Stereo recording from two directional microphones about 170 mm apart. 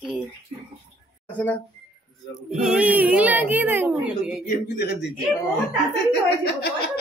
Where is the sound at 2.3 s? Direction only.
5° right (ahead or behind).